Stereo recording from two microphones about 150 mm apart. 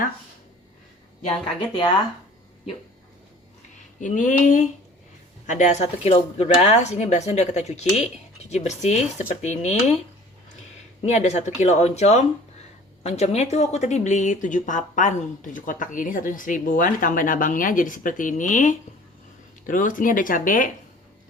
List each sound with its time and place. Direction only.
4.0 s speech: 60° left (ahead or behind)
11.0 s speech: 50° left (ahead or behind)